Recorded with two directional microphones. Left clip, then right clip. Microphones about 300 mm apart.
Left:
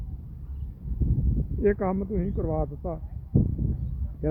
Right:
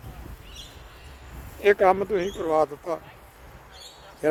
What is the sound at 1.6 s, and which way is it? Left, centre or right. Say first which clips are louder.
Speech: right 7 dB; centre.